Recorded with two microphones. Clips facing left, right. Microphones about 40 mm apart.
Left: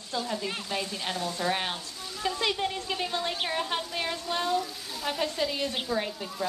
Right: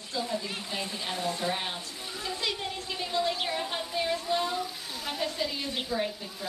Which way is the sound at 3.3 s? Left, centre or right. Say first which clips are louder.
Left 2 dB; left.